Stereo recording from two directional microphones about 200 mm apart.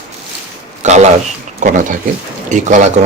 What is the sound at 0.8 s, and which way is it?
Speech, 35° right (ahead or behind).